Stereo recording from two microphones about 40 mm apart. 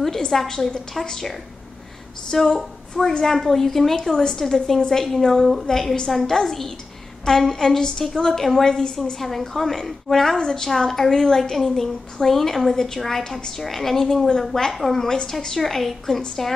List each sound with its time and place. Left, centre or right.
0.3 s a woman's voice: centre
1.0 s a woman's voice: centre
2.3 s a woman's voice: centre
9.2 s a woman's voice: centre